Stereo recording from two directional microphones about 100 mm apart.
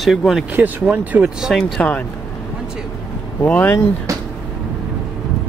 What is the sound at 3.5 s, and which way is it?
Speech, 15° left (ahead or behind).